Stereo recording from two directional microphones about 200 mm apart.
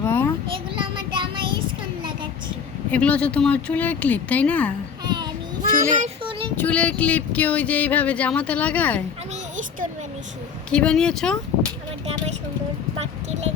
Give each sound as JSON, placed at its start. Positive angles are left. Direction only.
{"t": 0.0, "sound": "a sound", "side_deg": 10}
{"t": 0.4, "sound": "child singing", "side_deg": -25}
{"t": 2.9, "sound": "speech", "side_deg": 5}
{"t": 5.0, "sound": "child singing", "side_deg": -20}
{"t": 5.7, "sound": "a child's voice", "side_deg": -40}
{"t": 6.6, "sound": "speech", "side_deg": 5}
{"t": 10.7, "sound": "speech", "side_deg": 5}
{"t": 13.0, "sound": "a sound", "side_deg": -30}